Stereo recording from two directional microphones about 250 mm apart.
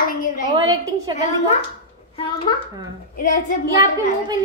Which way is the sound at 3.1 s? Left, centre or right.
Left.